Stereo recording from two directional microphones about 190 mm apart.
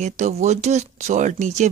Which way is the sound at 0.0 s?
40° right (ahead or behind).